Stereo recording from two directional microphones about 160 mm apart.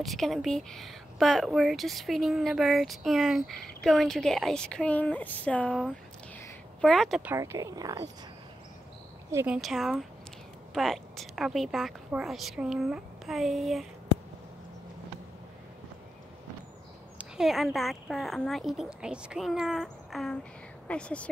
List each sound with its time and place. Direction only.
0.0 s a woman's voice: centre (ahead or behind)
7.2 s speech: 15° right (ahead or behind)
9.3 s speech: 15° right (ahead or behind)
9.6 s a woman's voice: centre (ahead or behind)
17.2 s a woman's voice: centre (ahead or behind)